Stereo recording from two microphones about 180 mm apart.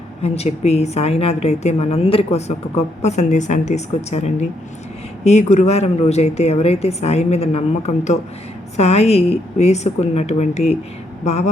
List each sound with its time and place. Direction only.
0.2 s a woman's voice: 35° left (ahead or behind)